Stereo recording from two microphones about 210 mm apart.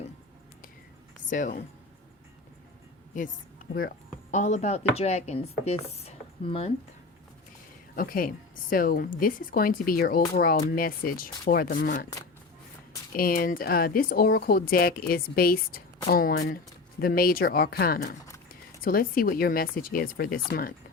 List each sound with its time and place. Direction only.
1.3 s speech: 40° left (ahead or behind)
3.1 s speech: 40° left (ahead or behind)
7.9 s a woman's voice: 40° left (ahead or behind)
13.1 s a woman's voice: 45° left (ahead or behind)